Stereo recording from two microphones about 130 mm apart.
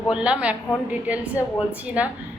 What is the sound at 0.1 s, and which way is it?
A woman's voice, 10° right (ahead or behind).